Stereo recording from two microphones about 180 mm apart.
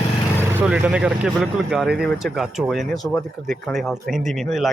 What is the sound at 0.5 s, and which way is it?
Speech, 10° right (ahead or behind).